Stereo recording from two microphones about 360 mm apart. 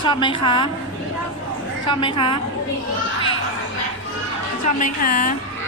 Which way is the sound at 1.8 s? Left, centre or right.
Centre.